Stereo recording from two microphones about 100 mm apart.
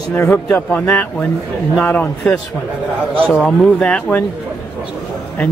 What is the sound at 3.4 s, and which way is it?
Speech, 10° left (ahead or behind).